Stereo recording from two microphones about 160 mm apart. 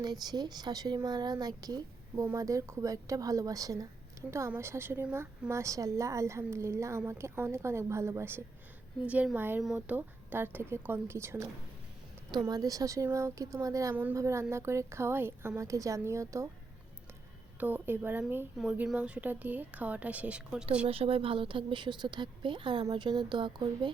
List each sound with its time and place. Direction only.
0.0 s a woman's voice: 25° right (ahead or behind)
17.6 s a woman's voice: 10° right (ahead or behind)
20.8 s speech: 35° right (ahead or behind)